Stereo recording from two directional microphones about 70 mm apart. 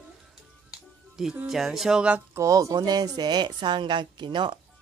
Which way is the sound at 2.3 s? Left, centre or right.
Right.